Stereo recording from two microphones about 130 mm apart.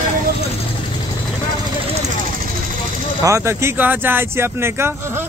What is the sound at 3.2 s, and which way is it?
Speech, 20° right (ahead or behind).